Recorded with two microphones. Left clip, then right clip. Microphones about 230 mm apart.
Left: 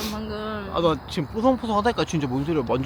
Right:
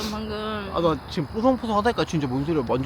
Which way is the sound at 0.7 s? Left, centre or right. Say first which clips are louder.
Left 1 dB; centre.